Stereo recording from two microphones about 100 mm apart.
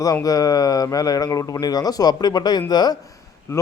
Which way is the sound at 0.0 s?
35° left (ahead or behind).